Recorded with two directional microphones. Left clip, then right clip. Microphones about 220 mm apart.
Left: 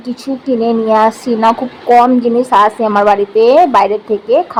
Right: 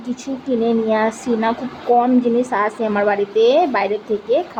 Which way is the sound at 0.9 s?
10° left (ahead or behind).